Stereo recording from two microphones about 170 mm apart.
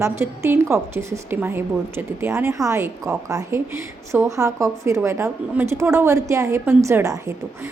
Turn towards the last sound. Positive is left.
turn(degrees=-15)  # may be behind; listen again after turning